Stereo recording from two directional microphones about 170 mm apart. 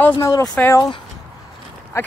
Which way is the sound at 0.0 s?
20° left (ahead or behind).